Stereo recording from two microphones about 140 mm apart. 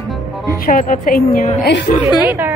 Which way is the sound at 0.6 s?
75° left (ahead or behind).